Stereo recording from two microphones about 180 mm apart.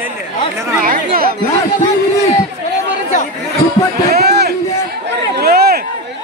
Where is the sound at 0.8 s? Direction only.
55° right (ahead or behind).